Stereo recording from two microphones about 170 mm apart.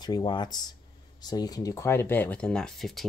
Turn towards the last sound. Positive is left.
turn(degrees=0)  # may be behind; listen again after turning